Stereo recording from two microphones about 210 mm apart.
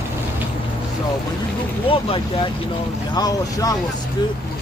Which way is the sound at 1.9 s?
25° left (ahead or behind).